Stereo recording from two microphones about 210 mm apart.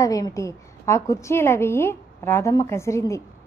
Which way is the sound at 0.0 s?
15° left (ahead or behind).